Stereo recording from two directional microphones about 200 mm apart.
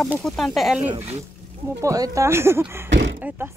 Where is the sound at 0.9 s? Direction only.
35° right (ahead or behind).